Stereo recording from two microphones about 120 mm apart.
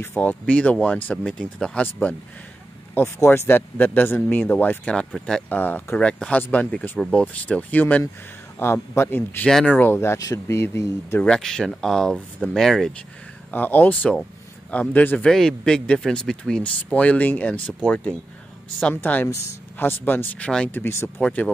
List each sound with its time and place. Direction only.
0.0 s a man's voice: 15° left (ahead or behind)
9.5 s speech: 5° left (ahead or behind)
9.8 s speech: 20° left (ahead or behind)
11.2 s speech: 5° left (ahead or behind)
13.5 s a man's voice: 15° left (ahead or behind)